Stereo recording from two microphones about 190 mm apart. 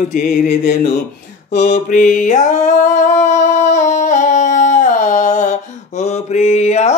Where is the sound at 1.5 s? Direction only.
40° left (ahead or behind).